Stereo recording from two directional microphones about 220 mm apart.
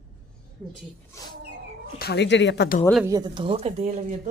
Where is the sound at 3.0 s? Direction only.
20° right (ahead or behind).